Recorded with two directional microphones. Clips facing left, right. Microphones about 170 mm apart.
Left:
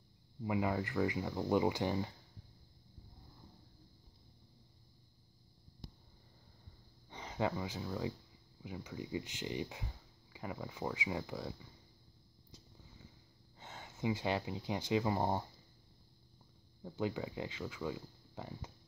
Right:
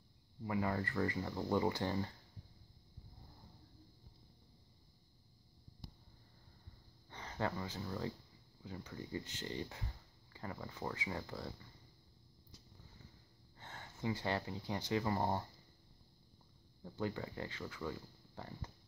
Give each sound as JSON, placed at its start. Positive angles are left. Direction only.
{"t": 0.4, "sound": "speech", "side_deg": 15}
{"t": 7.1, "sound": "speech", "side_deg": 15}
{"t": 13.6, "sound": "speech", "side_deg": 10}
{"t": 16.9, "sound": "speech", "side_deg": 15}